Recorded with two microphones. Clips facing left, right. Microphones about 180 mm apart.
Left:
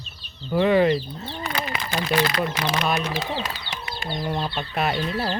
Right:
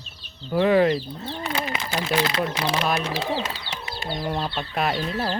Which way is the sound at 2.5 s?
30° right (ahead or behind).